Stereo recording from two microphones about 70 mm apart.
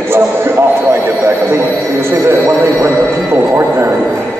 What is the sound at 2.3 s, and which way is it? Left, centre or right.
A man's voice, right.